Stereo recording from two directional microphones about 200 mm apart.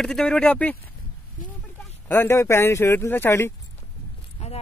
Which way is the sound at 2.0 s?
10° left (ahead or behind).